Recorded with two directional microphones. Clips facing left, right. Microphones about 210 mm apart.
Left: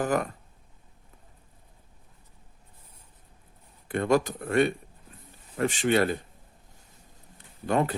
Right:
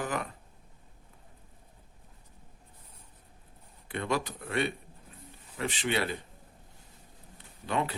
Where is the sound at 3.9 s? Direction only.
45° left (ahead or behind).